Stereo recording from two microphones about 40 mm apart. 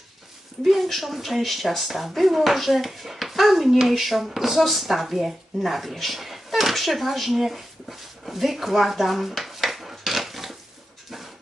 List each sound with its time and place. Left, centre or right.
0.6 s speech: centre